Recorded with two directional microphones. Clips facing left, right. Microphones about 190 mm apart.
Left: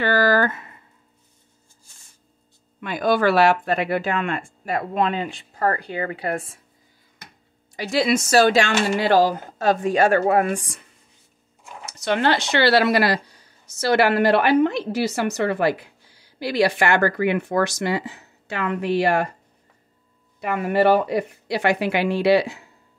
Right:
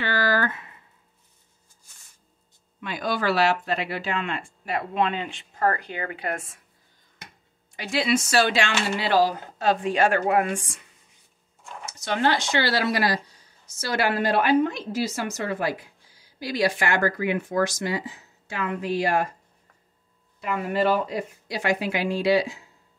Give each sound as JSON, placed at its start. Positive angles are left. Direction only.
{"t": 0.0, "sound": "speech", "side_deg": 45}
{"t": 2.8, "sound": "speech", "side_deg": 50}
{"t": 7.7, "sound": "speech", "side_deg": 40}
{"t": 12.0, "sound": "a woman's voice", "side_deg": 70}
{"t": 20.4, "sound": "a woman's voice", "side_deg": 65}